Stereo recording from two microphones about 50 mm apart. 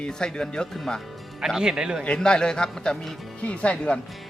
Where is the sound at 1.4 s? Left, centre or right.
Centre.